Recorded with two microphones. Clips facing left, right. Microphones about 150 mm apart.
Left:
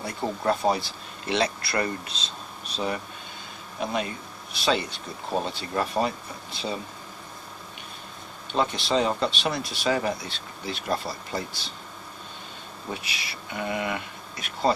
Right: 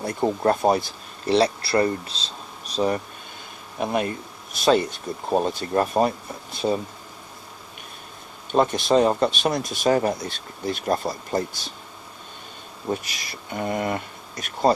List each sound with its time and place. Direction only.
0.0 s speech: 45° right (ahead or behind)
3.8 s speech: 55° right (ahead or behind)
8.5 s speech: 45° right (ahead or behind)
12.9 s speech: 45° right (ahead or behind)